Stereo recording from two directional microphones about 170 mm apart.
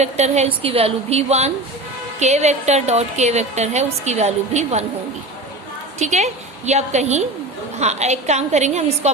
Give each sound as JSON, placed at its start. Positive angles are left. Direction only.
{"t": 0.0, "sound": "a woman's voice", "side_deg": -40}
{"t": 6.0, "sound": "a woman's voice", "side_deg": -40}